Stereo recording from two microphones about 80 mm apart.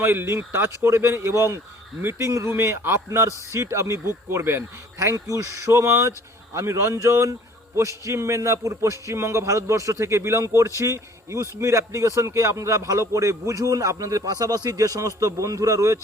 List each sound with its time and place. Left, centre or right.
0.0 s a man's voice: right